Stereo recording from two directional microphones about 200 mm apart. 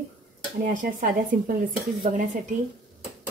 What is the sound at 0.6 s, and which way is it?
Speech, 40° right (ahead or behind).